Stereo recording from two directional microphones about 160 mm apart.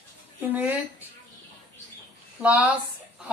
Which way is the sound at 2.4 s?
10° right (ahead or behind).